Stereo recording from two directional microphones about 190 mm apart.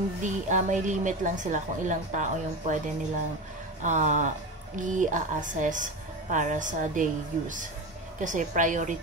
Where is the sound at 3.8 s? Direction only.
40° right (ahead or behind).